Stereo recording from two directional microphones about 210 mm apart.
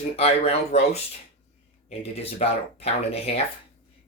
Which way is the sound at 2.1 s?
30° left (ahead or behind).